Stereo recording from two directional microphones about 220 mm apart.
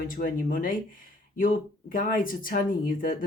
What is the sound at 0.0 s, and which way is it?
Speech, 40° left (ahead or behind).